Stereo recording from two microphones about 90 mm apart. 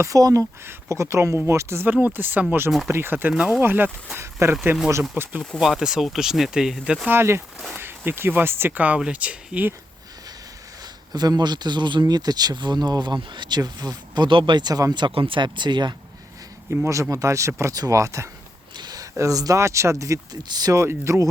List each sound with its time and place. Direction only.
0.0 s speech: 40° right (ahead or behind)
0.6 s speech: 30° right (ahead or behind); by 3.6 s 15° right (ahead or behind)
3.6 s speech: 25° right (ahead or behind)
5.5 s speech: 5° right (ahead or behind)
7.1 s speech: 30° right (ahead or behind)
11.1 s speech: 50° right (ahead or behind)
14.3 s speech: 65° right (ahead or behind); by 14.9 s 45° right (ahead or behind)
14.9 s speech: 60° right (ahead or behind)
16.8 s speech: 35° right (ahead or behind)
20.8 s speech: 30° right (ahead or behind)